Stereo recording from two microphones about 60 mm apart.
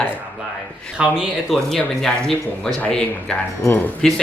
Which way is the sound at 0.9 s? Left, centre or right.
Centre.